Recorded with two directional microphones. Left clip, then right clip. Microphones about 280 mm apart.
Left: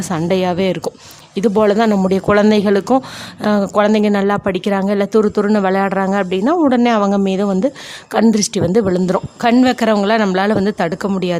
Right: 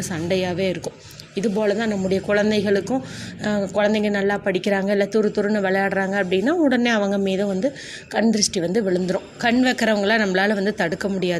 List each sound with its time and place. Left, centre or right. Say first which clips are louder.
0.0 s speech: left 6 dB; left